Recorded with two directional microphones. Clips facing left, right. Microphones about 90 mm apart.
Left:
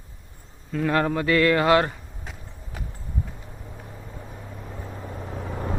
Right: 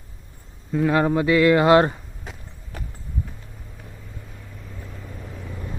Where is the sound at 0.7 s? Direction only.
10° right (ahead or behind).